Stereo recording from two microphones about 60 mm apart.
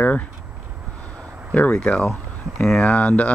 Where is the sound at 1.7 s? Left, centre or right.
Centre.